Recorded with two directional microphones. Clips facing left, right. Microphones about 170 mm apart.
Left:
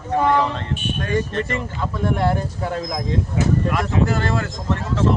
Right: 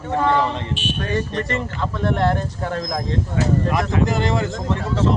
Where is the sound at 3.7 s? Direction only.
15° right (ahead or behind).